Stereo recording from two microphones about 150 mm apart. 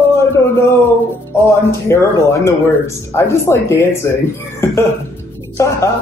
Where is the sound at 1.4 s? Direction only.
20° left (ahead or behind).